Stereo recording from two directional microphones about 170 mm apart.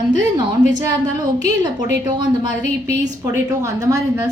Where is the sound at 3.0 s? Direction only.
20° right (ahead or behind).